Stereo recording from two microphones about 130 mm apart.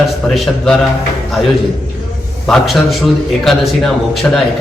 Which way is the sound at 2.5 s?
Centre (ahead or behind).